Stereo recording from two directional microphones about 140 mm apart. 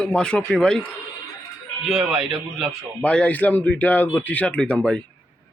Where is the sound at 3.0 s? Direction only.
10° left (ahead or behind).